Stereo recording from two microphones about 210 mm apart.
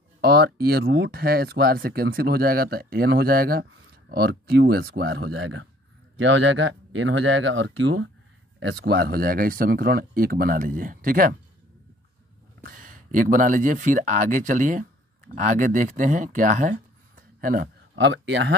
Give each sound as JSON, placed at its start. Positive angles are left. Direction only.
{"t": 0.2, "sound": "speech", "side_deg": -50}
{"t": 5.2, "sound": "speech", "side_deg": -75}
{"t": 6.2, "sound": "speech", "side_deg": -65}
{"t": 12.6, "sound": "speech", "side_deg": -40}
{"t": 17.9, "sound": "speech", "side_deg": -60}